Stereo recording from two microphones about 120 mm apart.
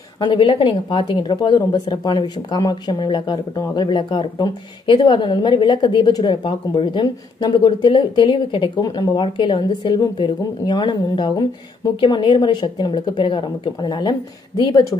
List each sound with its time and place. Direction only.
0.2 s speech: 45° left (ahead or behind)
8.8 s speech: 35° left (ahead or behind)